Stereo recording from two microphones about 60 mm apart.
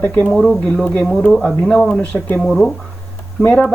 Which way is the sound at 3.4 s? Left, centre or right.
Left.